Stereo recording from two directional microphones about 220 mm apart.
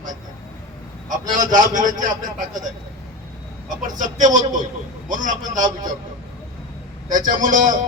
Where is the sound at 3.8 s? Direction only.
35° right (ahead or behind).